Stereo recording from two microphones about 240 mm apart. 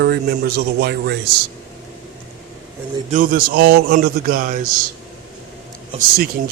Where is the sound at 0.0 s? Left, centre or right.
Right.